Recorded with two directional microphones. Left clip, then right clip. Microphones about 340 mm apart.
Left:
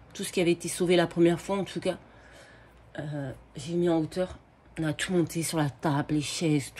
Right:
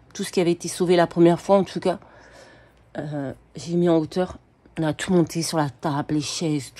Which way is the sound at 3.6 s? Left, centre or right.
Centre.